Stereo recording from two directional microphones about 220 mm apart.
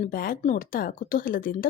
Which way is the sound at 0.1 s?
40° left (ahead or behind).